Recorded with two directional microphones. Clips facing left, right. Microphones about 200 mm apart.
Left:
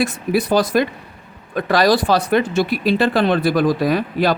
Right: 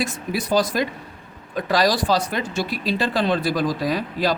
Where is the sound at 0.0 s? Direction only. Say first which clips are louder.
Left 7 dB; 60° left (ahead or behind).